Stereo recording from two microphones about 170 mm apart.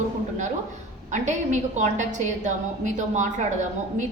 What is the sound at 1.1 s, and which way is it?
A woman's voice, 45° right (ahead or behind).